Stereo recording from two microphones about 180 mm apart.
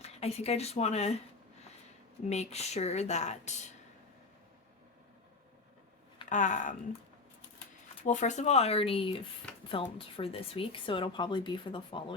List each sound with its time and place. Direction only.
0.0 s a woman's voice: 35° left (ahead or behind)
2.3 s a woman's voice: 35° left (ahead or behind)
6.2 s speech: 45° left (ahead or behind)
8.0 s a woman's voice: 40° left (ahead or behind)